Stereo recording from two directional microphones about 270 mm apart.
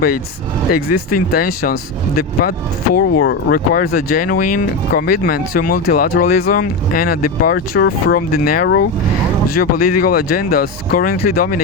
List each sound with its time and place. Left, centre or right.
0.7 s speech: left